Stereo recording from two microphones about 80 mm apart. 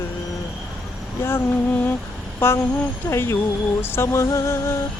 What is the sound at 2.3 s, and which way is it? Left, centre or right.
Speech, left.